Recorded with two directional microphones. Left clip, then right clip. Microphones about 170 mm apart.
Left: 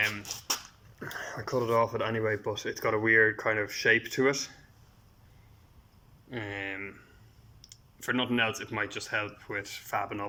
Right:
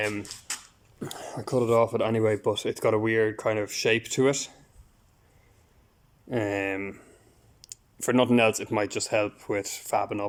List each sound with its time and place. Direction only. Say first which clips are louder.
0.0 s speech: even; 40° right (ahead or behind)
0.9 s speech: right 1 dB; 20° right (ahead or behind)
6.3 s speech: right 8 dB; 40° right (ahead or behind)